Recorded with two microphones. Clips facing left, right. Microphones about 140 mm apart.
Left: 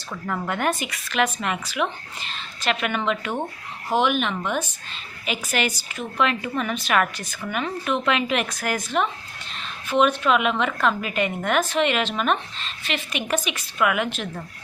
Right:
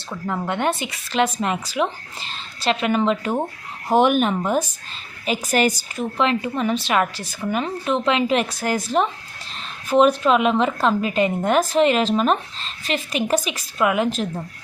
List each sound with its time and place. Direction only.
0.1 s a woman's voice: 20° right (ahead or behind); by 6.1 s 40° right (ahead or behind)
6.1 s a woman's voice: 30° right (ahead or behind)